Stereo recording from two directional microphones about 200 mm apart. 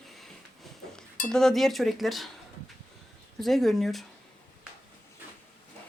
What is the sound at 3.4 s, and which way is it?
Speech, centre (ahead or behind).